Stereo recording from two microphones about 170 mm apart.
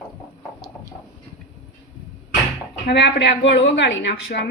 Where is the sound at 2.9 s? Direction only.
85° left.